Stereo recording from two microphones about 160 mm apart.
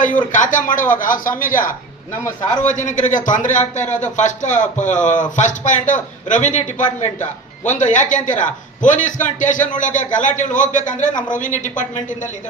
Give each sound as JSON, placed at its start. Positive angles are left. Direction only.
{"t": 0.3, "sound": "speech", "side_deg": 55}